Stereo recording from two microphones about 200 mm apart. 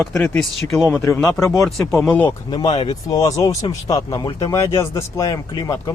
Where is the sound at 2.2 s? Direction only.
25° left (ahead or behind).